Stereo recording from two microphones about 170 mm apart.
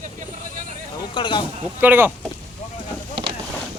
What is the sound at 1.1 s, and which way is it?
Speech, 30° left (ahead or behind).